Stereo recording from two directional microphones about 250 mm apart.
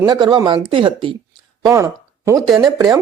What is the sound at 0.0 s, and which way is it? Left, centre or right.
Speech, centre.